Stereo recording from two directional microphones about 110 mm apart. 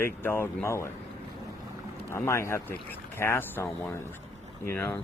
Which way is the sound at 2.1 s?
25° left (ahead or behind).